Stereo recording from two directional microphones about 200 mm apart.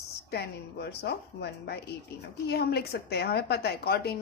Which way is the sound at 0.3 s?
55° left (ahead or behind).